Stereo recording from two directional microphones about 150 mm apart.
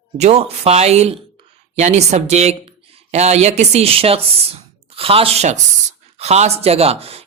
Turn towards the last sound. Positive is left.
turn(degrees=-40)  # may be behind; listen again after turning